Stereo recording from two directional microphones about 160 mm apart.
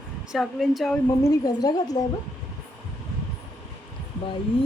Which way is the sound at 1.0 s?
20° left (ahead or behind).